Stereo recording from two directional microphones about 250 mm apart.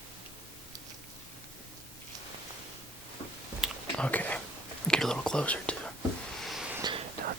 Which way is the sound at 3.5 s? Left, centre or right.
Centre.